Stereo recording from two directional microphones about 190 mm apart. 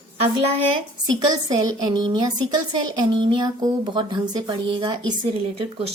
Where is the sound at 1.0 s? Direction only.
20° right (ahead or behind).